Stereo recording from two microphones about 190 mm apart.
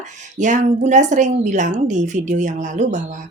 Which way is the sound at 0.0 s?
40° right (ahead or behind).